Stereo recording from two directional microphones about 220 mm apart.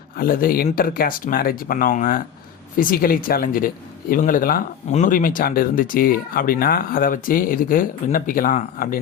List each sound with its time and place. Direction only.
0.2 s speech: 40° left (ahead or behind)